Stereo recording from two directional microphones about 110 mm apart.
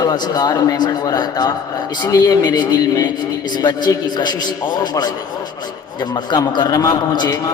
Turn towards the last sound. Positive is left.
turn(degrees=40)  # may be behind; listen again after turning